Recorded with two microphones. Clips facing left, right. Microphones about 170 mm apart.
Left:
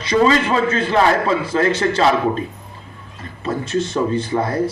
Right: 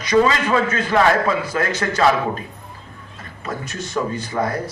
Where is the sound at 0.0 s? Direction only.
30° left (ahead or behind).